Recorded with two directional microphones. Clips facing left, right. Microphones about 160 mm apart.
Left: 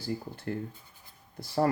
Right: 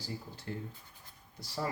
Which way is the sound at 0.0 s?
55° left (ahead or behind).